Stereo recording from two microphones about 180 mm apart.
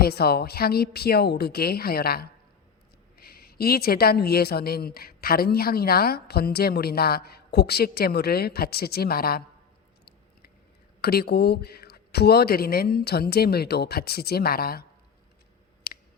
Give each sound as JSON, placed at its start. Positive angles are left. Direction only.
{"t": 0.0, "sound": "a woman's voice", "side_deg": 60}
{"t": 11.0, "sound": "a woman's voice", "side_deg": 60}